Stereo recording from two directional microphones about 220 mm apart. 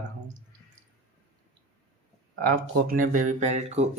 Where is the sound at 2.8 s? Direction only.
40° right (ahead or behind).